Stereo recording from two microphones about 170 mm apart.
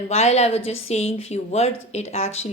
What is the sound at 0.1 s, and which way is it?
A woman's voice, 40° left (ahead or behind).